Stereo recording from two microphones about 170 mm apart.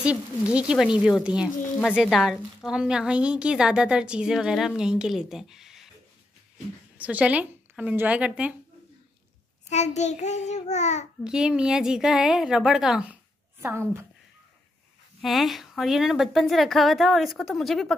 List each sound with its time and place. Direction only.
0.0 s a woman's voice: 5° right (ahead or behind)
7.0 s a woman's voice: 10° right (ahead or behind)
9.7 s child singing: 40° left (ahead or behind)
11.2 s a woman's voice: 5° right (ahead or behind)
15.2 s a woman's voice: centre (ahead or behind)